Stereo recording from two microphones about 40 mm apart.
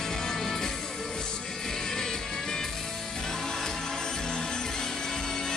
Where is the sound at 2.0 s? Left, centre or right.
Centre.